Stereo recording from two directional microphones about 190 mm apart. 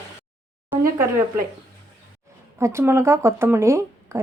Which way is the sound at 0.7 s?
15° right (ahead or behind).